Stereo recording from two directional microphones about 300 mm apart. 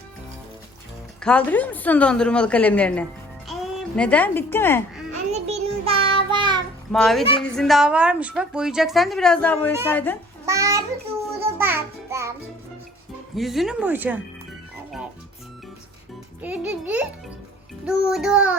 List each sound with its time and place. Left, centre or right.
1.2 s a woman's voice: centre
5.3 s child singing: right
6.9 s a woman's voice: centre
10.4 s child singing: centre
11.3 s music: centre
13.3 s a woman's voice: centre
16.4 s a woman's voice: centre